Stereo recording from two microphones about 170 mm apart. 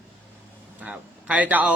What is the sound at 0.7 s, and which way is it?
Speech, 10° right (ahead or behind).